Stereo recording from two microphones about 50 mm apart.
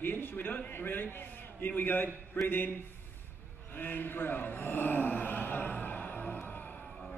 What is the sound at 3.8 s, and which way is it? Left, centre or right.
A man's voice, left.